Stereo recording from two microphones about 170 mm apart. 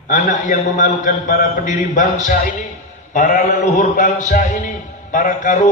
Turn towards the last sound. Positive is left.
turn(degrees=50)  # may be behind; listen again after turning